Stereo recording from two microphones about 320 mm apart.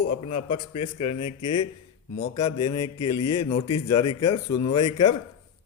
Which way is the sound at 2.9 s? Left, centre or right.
Left.